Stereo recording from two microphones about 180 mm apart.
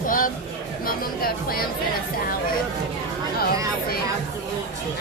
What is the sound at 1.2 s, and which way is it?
Speech, 55° left (ahead or behind).